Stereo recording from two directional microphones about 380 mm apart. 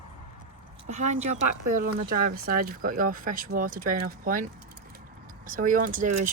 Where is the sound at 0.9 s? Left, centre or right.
Centre.